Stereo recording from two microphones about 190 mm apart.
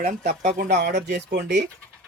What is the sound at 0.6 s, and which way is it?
Speech, 60° right (ahead or behind).